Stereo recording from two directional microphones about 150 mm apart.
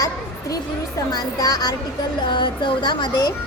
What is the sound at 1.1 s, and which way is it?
A child's voice, 25° left (ahead or behind).